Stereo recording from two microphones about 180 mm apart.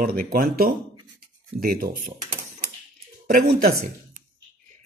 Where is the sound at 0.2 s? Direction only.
55° right (ahead or behind).